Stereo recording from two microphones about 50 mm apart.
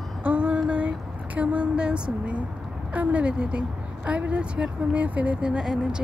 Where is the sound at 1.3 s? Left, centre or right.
Right.